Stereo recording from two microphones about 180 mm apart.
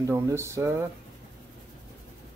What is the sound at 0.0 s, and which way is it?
Speech, 15° right (ahead or behind).